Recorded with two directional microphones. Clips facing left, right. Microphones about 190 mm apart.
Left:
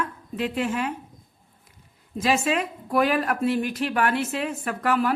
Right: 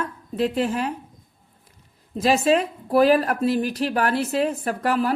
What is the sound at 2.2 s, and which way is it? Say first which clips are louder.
A woman's voice: right 4 dB; 35° right (ahead or behind).